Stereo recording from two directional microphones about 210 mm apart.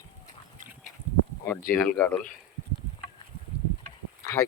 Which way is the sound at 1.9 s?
10° left (ahead or behind).